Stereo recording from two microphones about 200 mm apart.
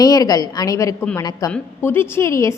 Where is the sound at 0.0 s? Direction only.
20° left (ahead or behind).